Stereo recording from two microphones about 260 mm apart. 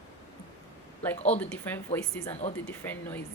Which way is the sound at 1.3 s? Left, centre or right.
Centre.